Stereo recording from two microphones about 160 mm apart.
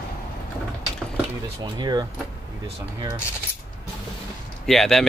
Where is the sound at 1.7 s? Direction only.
25° right (ahead or behind).